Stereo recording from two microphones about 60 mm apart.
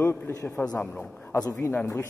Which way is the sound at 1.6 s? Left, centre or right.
Left.